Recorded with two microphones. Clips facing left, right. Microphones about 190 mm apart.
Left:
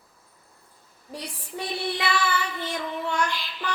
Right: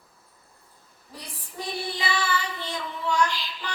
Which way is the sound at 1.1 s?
70° left (ahead or behind).